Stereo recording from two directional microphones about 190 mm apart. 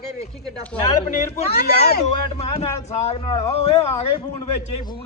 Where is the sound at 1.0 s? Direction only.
40° left (ahead or behind).